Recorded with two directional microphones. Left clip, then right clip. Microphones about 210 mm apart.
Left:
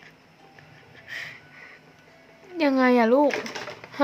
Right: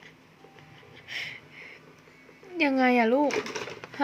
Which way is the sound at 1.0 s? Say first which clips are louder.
Even; 5° left (ahead or behind).